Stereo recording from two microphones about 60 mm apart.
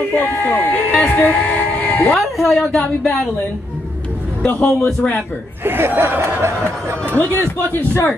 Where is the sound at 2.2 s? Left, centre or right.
Centre.